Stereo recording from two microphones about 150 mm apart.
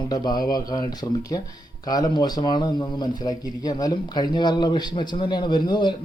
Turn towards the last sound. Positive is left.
turn(degrees=30)  # may be behind; listen again after turning